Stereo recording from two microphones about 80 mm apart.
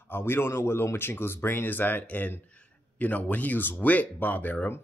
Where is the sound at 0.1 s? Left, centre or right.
Left.